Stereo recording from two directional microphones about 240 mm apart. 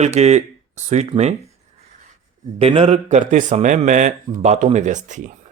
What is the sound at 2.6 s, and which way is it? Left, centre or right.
Speech, right.